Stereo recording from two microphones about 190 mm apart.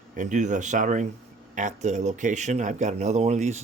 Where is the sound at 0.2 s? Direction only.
40° right (ahead or behind).